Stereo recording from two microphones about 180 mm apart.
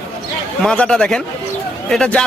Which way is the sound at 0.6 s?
5° left (ahead or behind).